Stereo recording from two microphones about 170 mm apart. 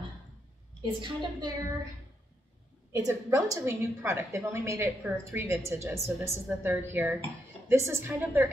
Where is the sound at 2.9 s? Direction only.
15° right (ahead or behind).